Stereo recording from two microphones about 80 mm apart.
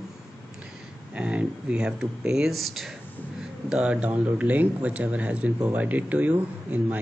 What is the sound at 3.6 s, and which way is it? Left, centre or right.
Speech, centre.